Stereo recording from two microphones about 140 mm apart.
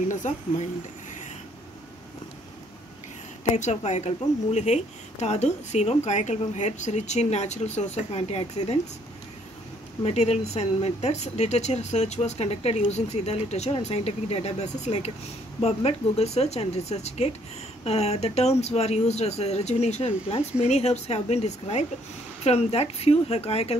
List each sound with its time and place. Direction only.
0.1 s speech: 60° left (ahead or behind)
3.5 s speech: 55° left (ahead or behind)
10.0 s speech: 50° left (ahead or behind)